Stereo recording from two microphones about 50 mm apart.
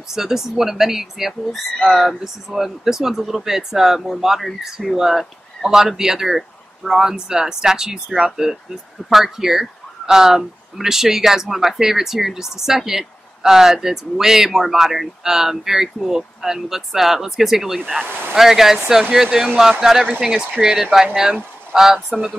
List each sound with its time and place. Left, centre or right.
0.1 s speech: centre
18.0 s speech: right
18.3 s speech: centre